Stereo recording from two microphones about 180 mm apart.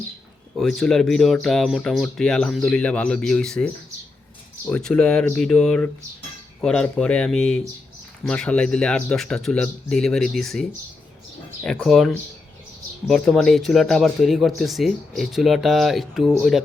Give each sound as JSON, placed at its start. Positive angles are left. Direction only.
{"t": 0.5, "sound": "speech", "side_deg": 0}